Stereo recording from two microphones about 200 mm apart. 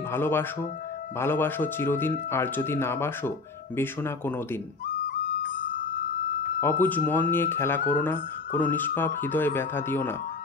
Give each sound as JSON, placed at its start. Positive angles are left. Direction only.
{"t": 0.1, "sound": "speech", "side_deg": 10}
{"t": 5.0, "sound": "flute", "side_deg": 45}
{"t": 6.6, "sound": "speech", "side_deg": 10}